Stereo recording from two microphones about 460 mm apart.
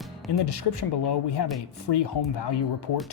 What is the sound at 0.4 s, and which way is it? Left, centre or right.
Speech, left.